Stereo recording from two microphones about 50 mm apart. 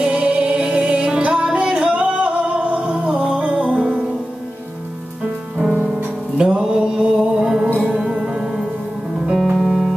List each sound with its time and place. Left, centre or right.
0.0 s music: right
6.3 s music: centre
9.4 s music: centre